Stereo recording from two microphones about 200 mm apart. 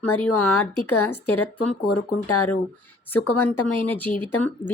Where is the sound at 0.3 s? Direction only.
90° left.